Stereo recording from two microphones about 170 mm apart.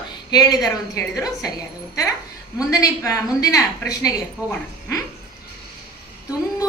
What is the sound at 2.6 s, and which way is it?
A woman's voice, 20° left (ahead or behind).